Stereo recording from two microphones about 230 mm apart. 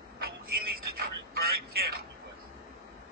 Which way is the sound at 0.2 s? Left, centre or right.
Right.